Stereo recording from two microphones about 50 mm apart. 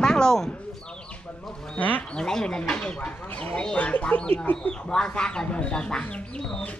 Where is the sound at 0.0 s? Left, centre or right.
Centre.